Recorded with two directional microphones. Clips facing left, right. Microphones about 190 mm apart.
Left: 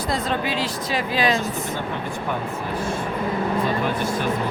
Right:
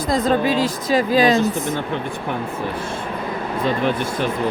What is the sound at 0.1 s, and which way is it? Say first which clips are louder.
A woman's voice: right 8 dB; 45° right (ahead or behind).